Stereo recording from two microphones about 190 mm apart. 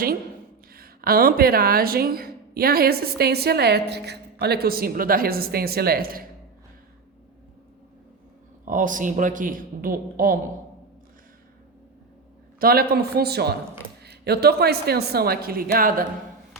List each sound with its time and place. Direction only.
0.7 s speech: 50° right (ahead or behind)
8.6 s speech: 45° right (ahead or behind)
12.5 s speech: 50° right (ahead or behind)